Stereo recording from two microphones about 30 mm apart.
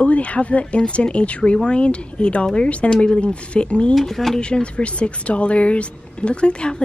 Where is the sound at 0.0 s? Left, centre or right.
Left.